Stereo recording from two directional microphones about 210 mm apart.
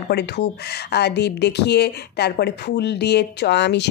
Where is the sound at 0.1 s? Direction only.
50° left (ahead or behind).